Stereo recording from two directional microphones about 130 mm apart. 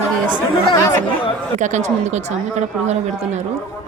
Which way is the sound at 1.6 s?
65° right (ahead or behind).